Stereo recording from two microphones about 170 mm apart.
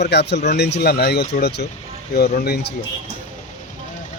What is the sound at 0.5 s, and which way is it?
Speech, 75° left (ahead or behind).